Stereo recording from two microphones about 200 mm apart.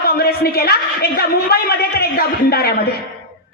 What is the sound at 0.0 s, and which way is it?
A woman's voice, 50° left (ahead or behind).